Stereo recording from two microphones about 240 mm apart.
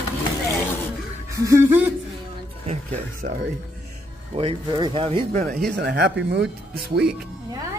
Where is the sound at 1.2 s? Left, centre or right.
Centre.